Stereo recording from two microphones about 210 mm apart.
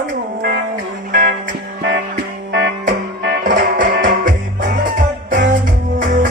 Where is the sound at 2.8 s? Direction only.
40° right (ahead or behind).